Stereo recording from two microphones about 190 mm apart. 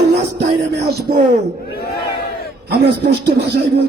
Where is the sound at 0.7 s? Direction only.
60° right (ahead or behind).